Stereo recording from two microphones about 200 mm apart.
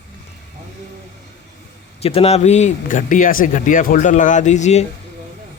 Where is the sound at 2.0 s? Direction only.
30° left (ahead or behind).